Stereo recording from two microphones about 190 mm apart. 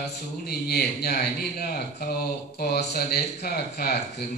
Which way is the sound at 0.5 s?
55° left (ahead or behind).